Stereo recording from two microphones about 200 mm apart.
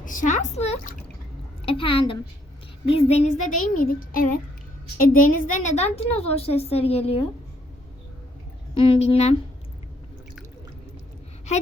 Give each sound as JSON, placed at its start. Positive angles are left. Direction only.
{"t": 0.0, "sound": "a woman's voice", "side_deg": 40}
{"t": 3.8, "sound": "a woman's voice", "side_deg": 45}
{"t": 8.7, "sound": "a woman's voice", "side_deg": 25}